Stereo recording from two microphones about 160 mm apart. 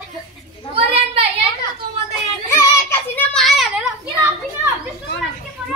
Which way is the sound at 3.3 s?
Centre (ahead or behind).